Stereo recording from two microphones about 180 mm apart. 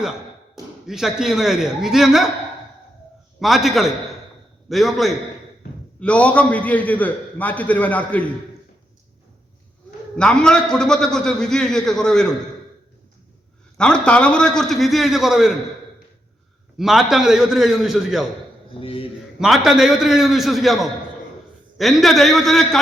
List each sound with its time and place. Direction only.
0.9 s a man's voice: centre (ahead or behind)
3.4 s a man's voice: centre (ahead or behind)
10.2 s a man's voice: 5° left (ahead or behind)
13.7 s a man's voice: 5° left (ahead or behind)
16.7 s a man's voice: centre (ahead or behind)
18.7 s speech: 30° left (ahead or behind)
19.4 s a man's voice: centre (ahead or behind)